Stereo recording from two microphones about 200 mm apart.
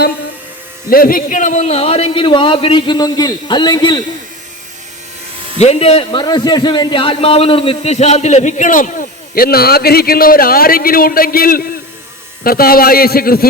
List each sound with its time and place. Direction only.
0.9 s a man's voice: 45° left (ahead or behind); by 4.0 s 20° left (ahead or behind)
5.5 s a man's voice: 30° left (ahead or behind); by 13.5 s 50° left (ahead or behind)